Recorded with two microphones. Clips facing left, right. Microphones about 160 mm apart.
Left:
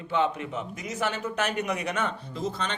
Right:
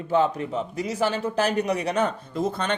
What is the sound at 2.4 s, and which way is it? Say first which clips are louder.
Speech: right 6 dB; 55° right (ahead or behind).